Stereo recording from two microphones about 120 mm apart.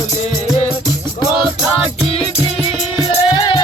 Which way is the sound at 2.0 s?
55° left (ahead or behind).